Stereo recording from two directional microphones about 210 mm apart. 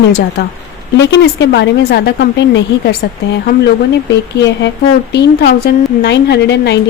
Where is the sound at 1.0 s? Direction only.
55° left (ahead or behind).